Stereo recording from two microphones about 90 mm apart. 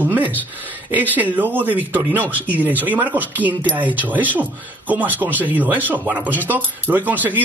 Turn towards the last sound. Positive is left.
turn(degrees=-20)  # may be behind; listen again after turning